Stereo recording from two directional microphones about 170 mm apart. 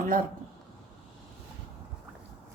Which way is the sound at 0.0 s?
55° right (ahead or behind).